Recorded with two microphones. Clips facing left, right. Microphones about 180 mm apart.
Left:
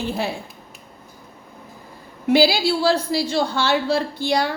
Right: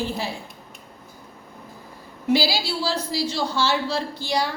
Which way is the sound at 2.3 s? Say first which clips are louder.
Left 5 dB; 60° left (ahead or behind).